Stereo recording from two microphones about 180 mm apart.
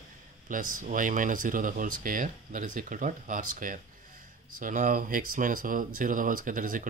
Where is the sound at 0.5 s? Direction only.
50° right (ahead or behind).